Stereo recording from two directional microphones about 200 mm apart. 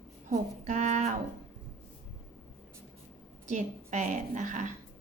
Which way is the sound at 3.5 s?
35° right (ahead or behind).